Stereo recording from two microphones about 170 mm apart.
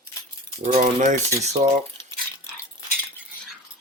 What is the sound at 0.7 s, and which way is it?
Speech, 45° right (ahead or behind).